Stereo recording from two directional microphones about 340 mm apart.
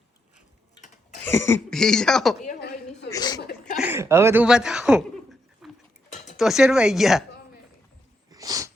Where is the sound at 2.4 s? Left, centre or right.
Left.